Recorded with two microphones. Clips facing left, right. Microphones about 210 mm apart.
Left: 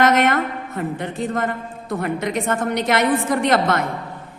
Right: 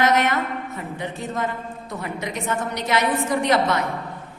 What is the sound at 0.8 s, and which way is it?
A woman's voice, 55° left (ahead or behind).